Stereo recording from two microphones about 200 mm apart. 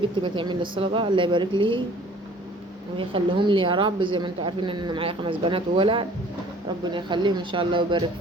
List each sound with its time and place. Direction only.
0.0 s a woman's voice: 25° right (ahead or behind)
3.0 s a woman's voice: 25° right (ahead or behind)